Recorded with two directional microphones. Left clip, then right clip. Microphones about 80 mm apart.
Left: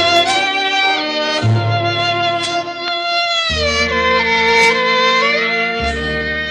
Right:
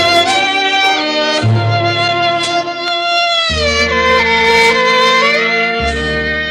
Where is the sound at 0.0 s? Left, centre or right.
Right.